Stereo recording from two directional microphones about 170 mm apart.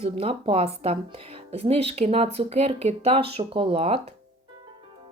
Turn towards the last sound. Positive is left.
turn(degrees=-35)  # may be behind; listen again after turning